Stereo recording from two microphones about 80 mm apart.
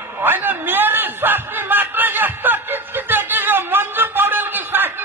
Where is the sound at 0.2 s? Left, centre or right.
Right.